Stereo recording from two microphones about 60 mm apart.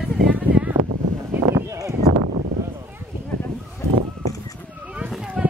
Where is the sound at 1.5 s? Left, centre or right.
Right.